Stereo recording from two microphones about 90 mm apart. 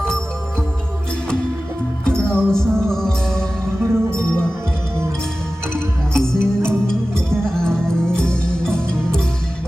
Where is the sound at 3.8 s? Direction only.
25° right (ahead or behind).